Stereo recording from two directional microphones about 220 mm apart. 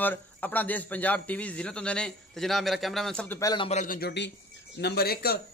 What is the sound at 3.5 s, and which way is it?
A man's voice, 25° left (ahead or behind).